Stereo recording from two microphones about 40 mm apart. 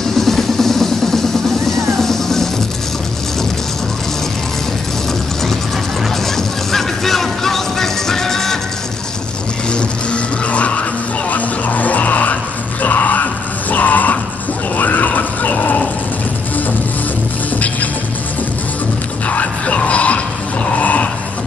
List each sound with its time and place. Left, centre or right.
0.2 s music: centre
6.3 s music: centre
9.7 s music: left
14.8 s a sound: left
19.2 s music: left
20.7 s a sound: left